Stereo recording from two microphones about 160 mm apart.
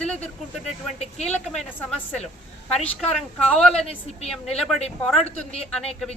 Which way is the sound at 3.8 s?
40° left (ahead or behind).